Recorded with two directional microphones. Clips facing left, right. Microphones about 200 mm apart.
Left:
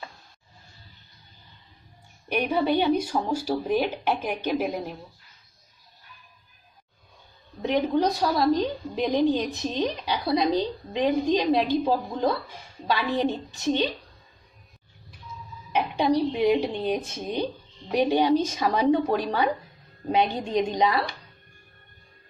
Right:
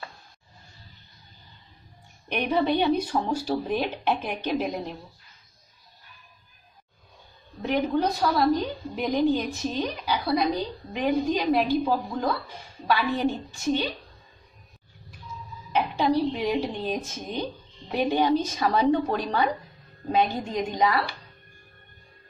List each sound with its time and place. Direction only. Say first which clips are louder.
2.2 s speech: even; 10° left (ahead or behind)
7.6 s a woman's voice: left 1 dB; 15° left (ahead or behind)
15.7 s a woman's voice: left 1 dB; 15° left (ahead or behind)